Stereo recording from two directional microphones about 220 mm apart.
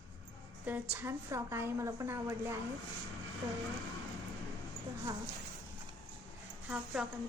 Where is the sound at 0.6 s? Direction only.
10° right (ahead or behind).